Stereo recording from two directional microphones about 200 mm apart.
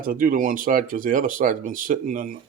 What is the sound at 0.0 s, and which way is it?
Speech, 45° right (ahead or behind).